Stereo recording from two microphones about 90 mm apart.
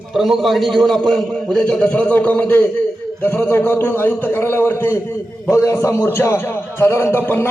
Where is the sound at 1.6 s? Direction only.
15° left (ahead or behind).